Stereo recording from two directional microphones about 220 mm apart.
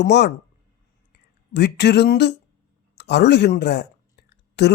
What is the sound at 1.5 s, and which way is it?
A woman's voice, 50° left (ahead or behind).